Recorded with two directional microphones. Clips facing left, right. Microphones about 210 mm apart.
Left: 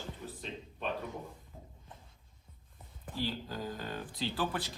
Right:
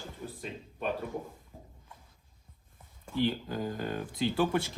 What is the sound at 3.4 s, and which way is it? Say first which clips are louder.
Speech: right 5 dB; 50° right (ahead or behind).